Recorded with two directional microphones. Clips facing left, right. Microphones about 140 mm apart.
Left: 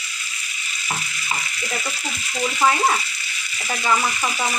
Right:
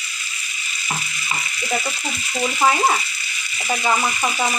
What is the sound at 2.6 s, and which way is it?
Sizzle, 15° right (ahead or behind).